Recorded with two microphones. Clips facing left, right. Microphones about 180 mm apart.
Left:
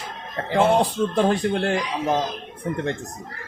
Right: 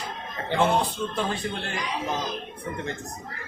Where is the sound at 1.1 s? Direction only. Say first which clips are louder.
Left 9 dB; 65° left (ahead or behind).